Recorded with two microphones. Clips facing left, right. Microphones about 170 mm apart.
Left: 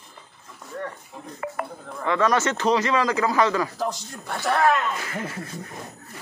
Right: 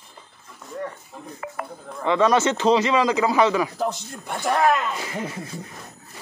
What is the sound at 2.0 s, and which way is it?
Speech, 20° right (ahead or behind).